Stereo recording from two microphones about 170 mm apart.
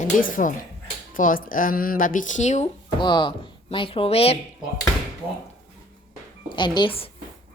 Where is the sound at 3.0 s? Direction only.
25° left (ahead or behind).